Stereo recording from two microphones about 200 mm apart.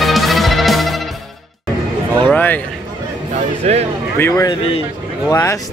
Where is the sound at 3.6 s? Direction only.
35° right (ahead or behind).